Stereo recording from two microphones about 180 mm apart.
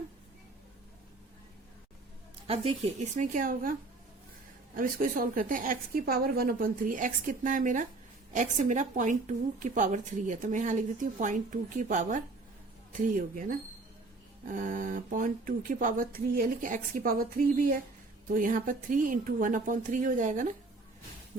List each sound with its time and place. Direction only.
2.5 s a woman's voice: 35° right (ahead or behind)
14.4 s a woman's voice: 45° right (ahead or behind)